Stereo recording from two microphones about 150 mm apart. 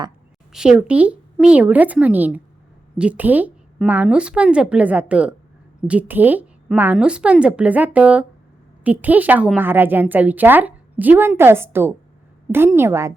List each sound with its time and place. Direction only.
0.5 s a woman's voice: 5° right (ahead or behind)